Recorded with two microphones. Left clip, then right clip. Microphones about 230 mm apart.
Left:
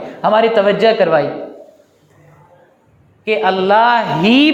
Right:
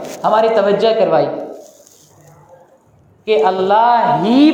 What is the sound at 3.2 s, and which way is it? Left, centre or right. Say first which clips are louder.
A man's voice: right 1 dB; left.